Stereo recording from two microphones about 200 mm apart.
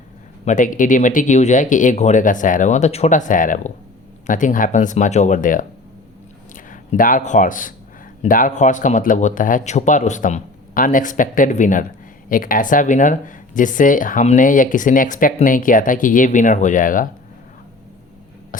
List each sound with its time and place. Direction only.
0.4 s speech: 40° left (ahead or behind)